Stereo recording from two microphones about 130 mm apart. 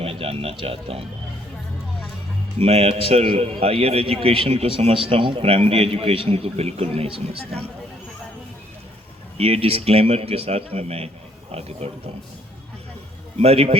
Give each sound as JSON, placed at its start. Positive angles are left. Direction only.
{"t": 0.0, "sound": "speech", "side_deg": -45}
{"t": 2.6, "sound": "a man's voice", "side_deg": -55}
{"t": 9.4, "sound": "a man's voice", "side_deg": -50}
{"t": 13.3, "sound": "a man's voice", "side_deg": -55}